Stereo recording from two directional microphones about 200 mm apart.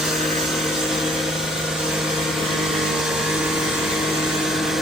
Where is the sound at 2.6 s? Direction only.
Centre (ahead or behind).